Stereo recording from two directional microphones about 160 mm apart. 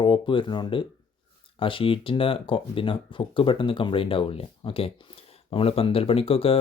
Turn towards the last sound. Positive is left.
turn(degrees=35)  # may be behind; listen again after turning